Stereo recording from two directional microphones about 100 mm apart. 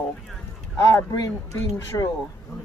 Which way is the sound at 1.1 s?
35° left (ahead or behind).